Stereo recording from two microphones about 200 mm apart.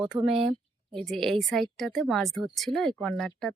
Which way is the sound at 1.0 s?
Centre (ahead or behind).